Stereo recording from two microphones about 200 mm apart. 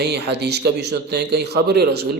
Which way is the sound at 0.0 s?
55° right (ahead or behind).